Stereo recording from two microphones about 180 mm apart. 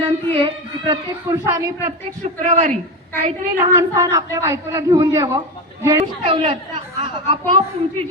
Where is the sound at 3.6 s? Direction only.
20° right (ahead or behind).